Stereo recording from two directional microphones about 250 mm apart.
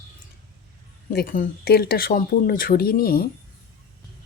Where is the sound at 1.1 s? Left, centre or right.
Left.